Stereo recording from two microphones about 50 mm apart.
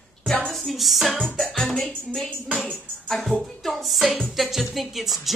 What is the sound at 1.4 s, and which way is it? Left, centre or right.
Music, centre.